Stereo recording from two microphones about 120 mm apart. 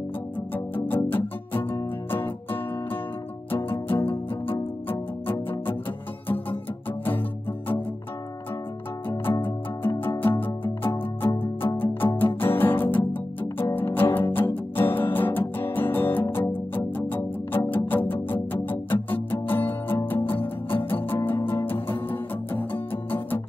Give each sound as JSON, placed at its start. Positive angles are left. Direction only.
{"t": 0.7, "sound": "music", "side_deg": 15}
{"t": 9.2, "sound": "music", "side_deg": 15}